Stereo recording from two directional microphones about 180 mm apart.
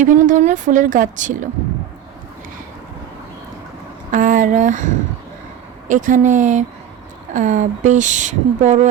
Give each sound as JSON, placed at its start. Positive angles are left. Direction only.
{"t": 0.0, "sound": "speech", "side_deg": -45}
{"t": 4.1, "sound": "speech", "side_deg": -45}
{"t": 5.9, "sound": "speech", "side_deg": -45}